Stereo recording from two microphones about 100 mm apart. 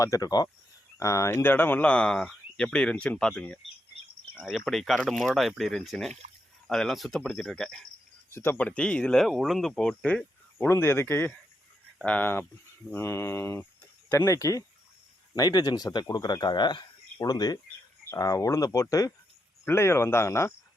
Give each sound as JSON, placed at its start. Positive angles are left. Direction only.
{"t": 0.0, "sound": "speech", "side_deg": 35}
{"t": 4.4, "sound": "speech", "side_deg": 0}
{"t": 8.3, "sound": "speech", "side_deg": 20}
{"t": 10.6, "sound": "speech", "side_deg": 25}